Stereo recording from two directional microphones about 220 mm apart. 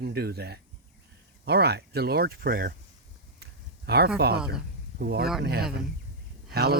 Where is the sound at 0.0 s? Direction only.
45° right (ahead or behind).